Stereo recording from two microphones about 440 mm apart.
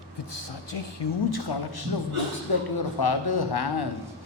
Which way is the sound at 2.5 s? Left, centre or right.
Left.